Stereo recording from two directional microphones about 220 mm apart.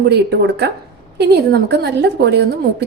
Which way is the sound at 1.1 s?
50° right (ahead or behind).